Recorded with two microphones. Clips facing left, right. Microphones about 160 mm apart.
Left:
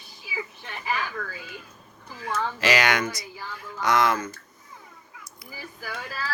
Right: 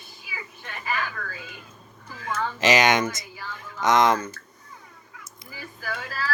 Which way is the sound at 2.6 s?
20° right (ahead or behind).